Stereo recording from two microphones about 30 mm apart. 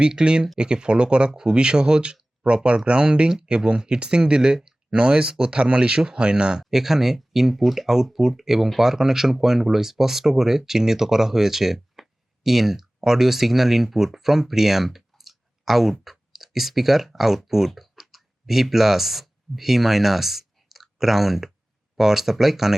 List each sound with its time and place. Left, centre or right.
0.0 s speech: right
3.2 s speech: right
3.5 s speech: right
6.7 s speech: centre